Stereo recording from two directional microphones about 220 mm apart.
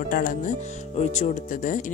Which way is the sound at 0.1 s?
40° left (ahead or behind).